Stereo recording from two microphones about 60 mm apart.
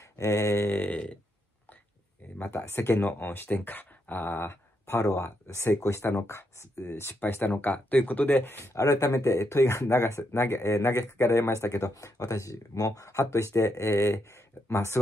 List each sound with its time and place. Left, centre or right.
0.2 s speech: left
0.7 s speech: left
2.5 s speech: left
7.2 s speech: left
8.7 s speech: left